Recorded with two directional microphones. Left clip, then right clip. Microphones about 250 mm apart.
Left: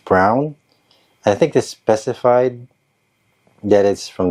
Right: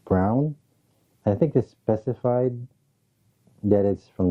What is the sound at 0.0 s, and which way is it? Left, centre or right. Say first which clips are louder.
Speech: left 10 dB; centre.